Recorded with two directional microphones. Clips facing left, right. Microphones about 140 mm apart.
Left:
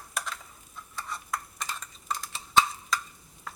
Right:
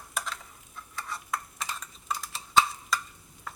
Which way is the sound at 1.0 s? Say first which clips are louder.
Even; centre (ahead or behind).